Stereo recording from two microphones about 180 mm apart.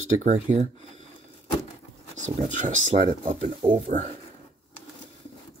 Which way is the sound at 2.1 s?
45° right (ahead or behind).